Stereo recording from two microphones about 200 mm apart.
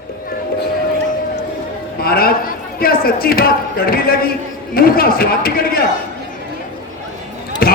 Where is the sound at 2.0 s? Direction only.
50° left (ahead or behind).